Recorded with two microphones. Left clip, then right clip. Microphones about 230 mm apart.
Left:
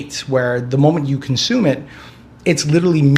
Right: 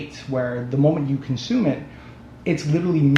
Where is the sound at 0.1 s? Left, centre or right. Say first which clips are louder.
Left 9 dB; left.